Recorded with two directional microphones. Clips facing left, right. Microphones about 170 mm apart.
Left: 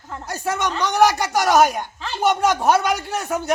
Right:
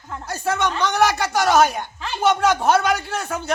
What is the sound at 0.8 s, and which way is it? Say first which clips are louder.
A woman's voice: left 5 dB; 10° left (ahead or behind).